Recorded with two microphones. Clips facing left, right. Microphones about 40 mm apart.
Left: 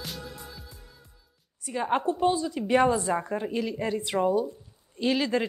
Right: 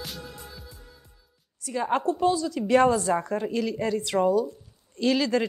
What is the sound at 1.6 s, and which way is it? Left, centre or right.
A woman's voice, centre.